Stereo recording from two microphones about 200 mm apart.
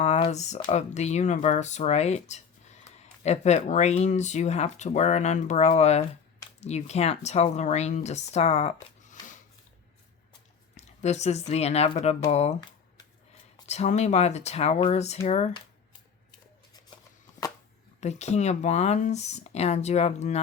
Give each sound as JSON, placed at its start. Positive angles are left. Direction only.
{"t": 0.0, "sound": "speech", "side_deg": 35}
{"t": 10.8, "sound": "speech", "side_deg": 35}
{"t": 13.7, "sound": "speech", "side_deg": 35}
{"t": 18.0, "sound": "speech", "side_deg": 35}